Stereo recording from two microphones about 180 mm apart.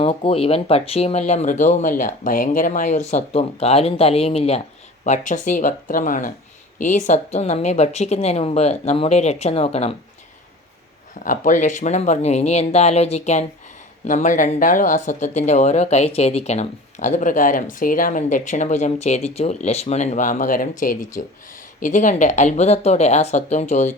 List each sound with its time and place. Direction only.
0.0 s speech: 35° left (ahead or behind)
11.2 s speech: 45° left (ahead or behind)